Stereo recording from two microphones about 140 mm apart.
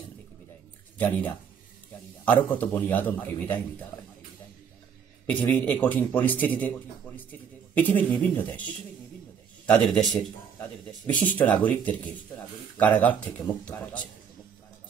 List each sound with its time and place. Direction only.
0.9 s speech: 10° left (ahead or behind)
5.2 s speech: 10° left (ahead or behind)
7.8 s speech: 10° left (ahead or behind)
9.7 s a man's voice: 5° left (ahead or behind)